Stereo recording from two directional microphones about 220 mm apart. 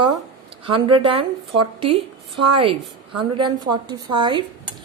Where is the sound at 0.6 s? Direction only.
25° right (ahead or behind).